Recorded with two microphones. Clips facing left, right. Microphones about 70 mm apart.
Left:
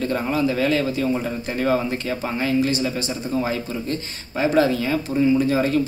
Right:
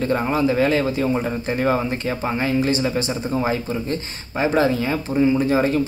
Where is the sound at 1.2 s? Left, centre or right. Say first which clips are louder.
Right 2 dB; centre.